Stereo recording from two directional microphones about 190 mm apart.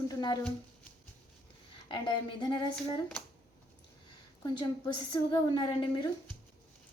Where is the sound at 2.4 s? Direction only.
20° left (ahead or behind).